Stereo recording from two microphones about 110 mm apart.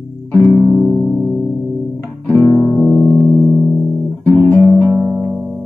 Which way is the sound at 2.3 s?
15° left (ahead or behind).